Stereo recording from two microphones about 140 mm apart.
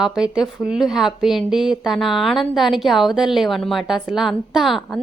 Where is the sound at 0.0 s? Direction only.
5° right (ahead or behind).